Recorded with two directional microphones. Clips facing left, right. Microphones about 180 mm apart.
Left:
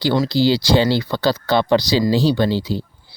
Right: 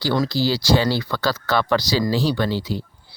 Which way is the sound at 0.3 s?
25° left (ahead or behind).